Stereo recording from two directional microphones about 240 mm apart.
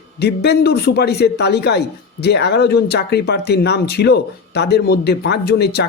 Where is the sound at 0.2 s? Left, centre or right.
Left.